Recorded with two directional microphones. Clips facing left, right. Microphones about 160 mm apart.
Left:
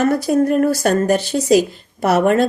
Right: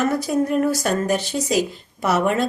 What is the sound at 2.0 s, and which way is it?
Speech, 60° left (ahead or behind).